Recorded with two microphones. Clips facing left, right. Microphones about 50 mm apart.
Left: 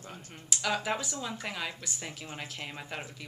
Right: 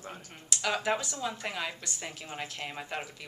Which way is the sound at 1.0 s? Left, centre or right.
Centre.